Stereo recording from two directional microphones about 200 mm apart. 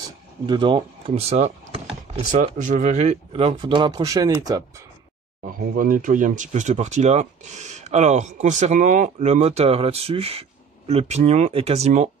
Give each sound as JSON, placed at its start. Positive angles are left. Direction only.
{"t": 0.5, "sound": "speech", "side_deg": -25}
{"t": 5.4, "sound": "speech", "side_deg": -45}